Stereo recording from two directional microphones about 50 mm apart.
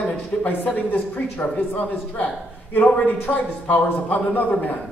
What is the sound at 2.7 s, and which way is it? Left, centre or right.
Speech, left.